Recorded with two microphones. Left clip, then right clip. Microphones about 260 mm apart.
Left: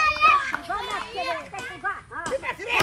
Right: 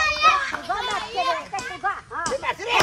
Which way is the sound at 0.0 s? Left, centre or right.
Centre.